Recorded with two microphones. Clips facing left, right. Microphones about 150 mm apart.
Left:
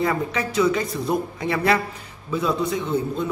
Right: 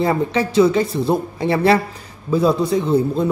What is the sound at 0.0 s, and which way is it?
A man's voice, 30° right (ahead or behind).